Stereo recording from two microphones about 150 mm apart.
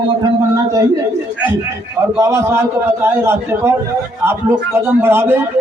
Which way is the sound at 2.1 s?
20° right (ahead or behind).